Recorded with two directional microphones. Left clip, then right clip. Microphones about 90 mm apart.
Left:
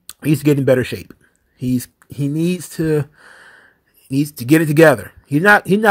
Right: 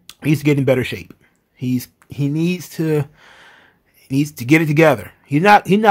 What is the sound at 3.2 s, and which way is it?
Gasp, 35° left (ahead or behind).